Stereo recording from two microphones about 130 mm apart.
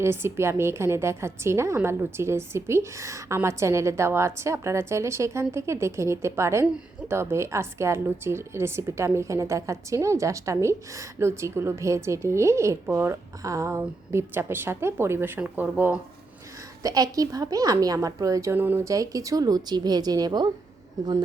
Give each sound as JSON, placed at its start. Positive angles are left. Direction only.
{"t": 0.0, "sound": "a woman's voice", "side_deg": -20}
{"t": 16.8, "sound": "a woman's voice", "side_deg": -30}
{"t": 18.9, "sound": "a woman's voice", "side_deg": -25}